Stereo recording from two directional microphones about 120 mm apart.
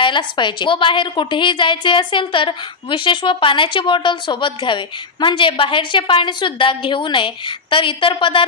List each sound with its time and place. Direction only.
0.0 s a woman's voice: 45° left (ahead or behind)